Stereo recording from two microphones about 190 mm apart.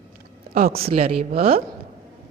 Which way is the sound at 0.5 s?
50° right (ahead or behind).